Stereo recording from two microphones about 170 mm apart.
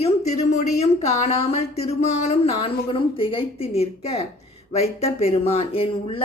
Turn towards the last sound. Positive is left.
turn(degrees=35)  # may be behind; listen again after turning